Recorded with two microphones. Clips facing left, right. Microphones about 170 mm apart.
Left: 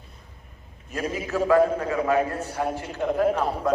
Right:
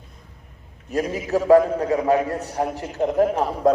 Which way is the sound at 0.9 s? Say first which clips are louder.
Right 5 dB; 40° right (ahead or behind).